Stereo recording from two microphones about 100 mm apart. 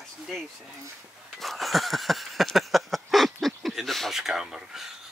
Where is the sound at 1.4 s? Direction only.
Centre (ahead or behind).